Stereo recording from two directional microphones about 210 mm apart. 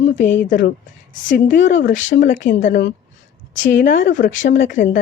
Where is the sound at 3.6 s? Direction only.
60° left (ahead or behind).